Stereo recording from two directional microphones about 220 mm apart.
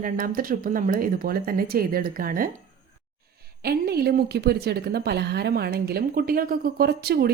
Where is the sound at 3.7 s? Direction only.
45° right (ahead or behind).